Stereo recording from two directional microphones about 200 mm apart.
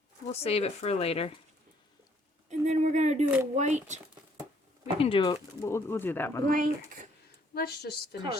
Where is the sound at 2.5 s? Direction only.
35° right (ahead or behind).